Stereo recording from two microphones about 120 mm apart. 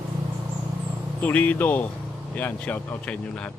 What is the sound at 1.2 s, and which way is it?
Speech, 15° left (ahead or behind).